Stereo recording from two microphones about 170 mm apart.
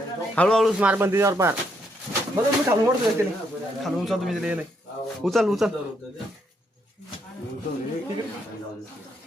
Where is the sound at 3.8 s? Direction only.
Centre (ahead or behind).